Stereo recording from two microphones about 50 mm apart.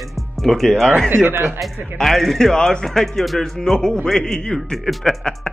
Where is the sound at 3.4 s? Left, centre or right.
Centre.